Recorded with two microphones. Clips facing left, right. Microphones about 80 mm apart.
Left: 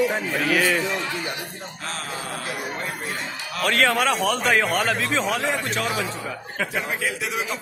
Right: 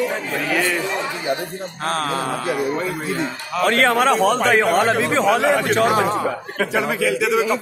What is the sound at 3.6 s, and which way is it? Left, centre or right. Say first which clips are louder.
A man's voice: right 4 dB; right.